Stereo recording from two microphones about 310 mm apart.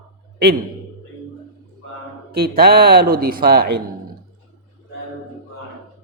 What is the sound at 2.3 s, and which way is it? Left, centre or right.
Speech, right.